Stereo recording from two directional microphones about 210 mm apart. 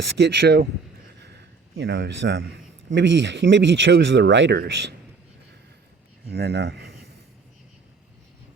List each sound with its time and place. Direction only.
0.0 s speech: 55° right (ahead or behind)
1.7 s speech: 60° right (ahead or behind)
6.3 s speech: 55° right (ahead or behind)